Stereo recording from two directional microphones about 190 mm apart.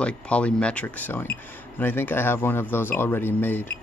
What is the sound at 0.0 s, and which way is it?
Speech, 5° left (ahead or behind).